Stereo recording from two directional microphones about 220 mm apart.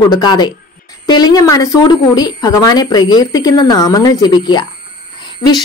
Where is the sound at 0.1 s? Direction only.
20° left (ahead or behind).